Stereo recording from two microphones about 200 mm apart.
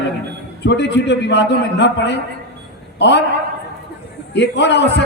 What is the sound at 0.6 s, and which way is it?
A man's voice, 60° left (ahead or behind).